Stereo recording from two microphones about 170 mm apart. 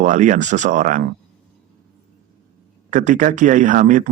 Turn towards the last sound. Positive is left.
turn(degrees=-45)  # may be behind; listen again after turning